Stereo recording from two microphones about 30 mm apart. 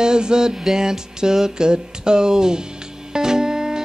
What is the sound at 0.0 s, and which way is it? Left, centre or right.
Music, right.